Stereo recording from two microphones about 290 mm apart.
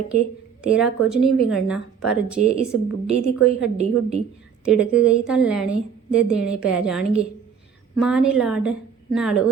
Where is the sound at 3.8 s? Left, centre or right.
Right.